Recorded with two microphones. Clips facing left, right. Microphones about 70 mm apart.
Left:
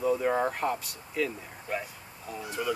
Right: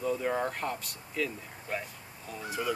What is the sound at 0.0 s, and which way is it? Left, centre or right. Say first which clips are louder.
Speech: left 4 dB; centre.